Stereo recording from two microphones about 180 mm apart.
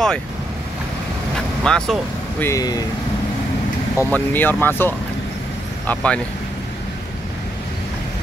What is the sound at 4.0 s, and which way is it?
Speech, 10° left (ahead or behind).